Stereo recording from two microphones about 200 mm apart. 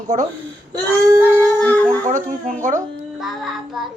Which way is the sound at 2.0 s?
40° right (ahead or behind).